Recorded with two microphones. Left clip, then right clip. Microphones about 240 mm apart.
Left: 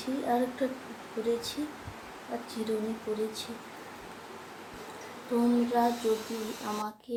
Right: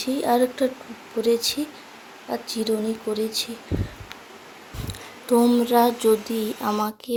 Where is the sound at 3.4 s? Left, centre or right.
Right.